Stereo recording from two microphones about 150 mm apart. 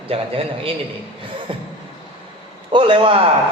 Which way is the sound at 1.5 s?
35° right (ahead or behind).